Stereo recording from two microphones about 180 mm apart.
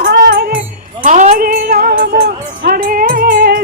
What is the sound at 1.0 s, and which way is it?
Music, 45° right (ahead or behind).